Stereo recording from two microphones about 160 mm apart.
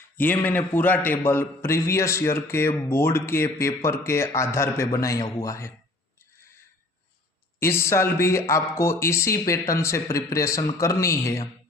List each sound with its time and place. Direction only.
0.2 s a man's voice: 10° left (ahead or behind)
7.6 s a man's voice: 15° left (ahead or behind)